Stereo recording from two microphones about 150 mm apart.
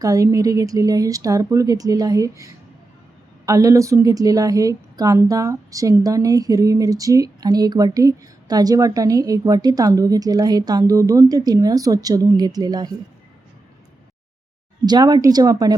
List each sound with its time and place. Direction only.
0.0 s a woman's voice: 20° right (ahead or behind)
14.8 s a woman's voice: 25° right (ahead or behind)